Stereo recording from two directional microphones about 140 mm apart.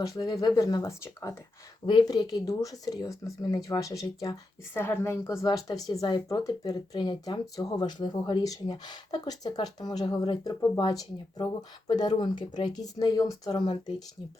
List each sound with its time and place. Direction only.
0.0 s speech: 25° left (ahead or behind)